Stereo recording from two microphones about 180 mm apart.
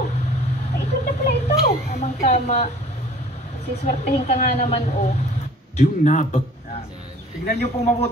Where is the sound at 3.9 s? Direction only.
40° left (ahead or behind).